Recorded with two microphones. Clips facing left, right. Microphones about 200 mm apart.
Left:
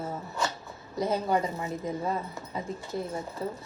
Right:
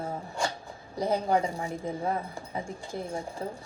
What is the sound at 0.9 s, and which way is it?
A woman's voice, 15° right (ahead or behind).